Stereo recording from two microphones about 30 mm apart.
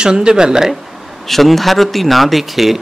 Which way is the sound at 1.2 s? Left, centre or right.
Centre.